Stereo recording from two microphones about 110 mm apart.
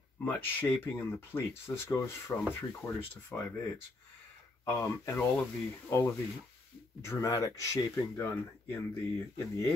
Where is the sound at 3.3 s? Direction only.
10° left (ahead or behind).